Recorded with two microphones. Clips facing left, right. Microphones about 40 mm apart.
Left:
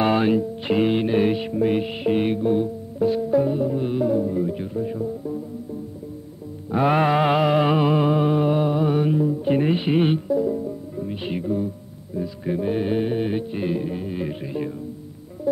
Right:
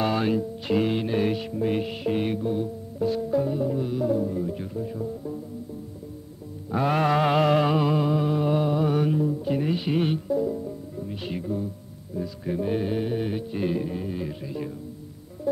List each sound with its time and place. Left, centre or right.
0.0 s music: left
3.8 s music: left
4.1 s music: centre
6.7 s music: left
7.6 s music: left
8.5 s music: centre
9.4 s music: left
10.2 s music: centre
11.0 s music: left
14.2 s music: left
15.5 s music: centre